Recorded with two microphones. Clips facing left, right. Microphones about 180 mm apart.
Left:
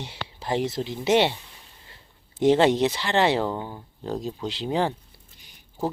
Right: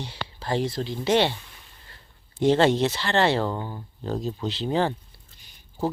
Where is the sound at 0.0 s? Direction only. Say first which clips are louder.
Right 1 dB; 20° left (ahead or behind).